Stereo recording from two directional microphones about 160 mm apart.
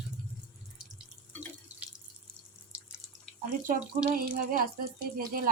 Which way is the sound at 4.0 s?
65° right (ahead or behind).